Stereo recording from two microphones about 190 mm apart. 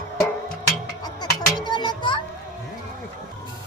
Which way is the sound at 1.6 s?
25° left (ahead or behind).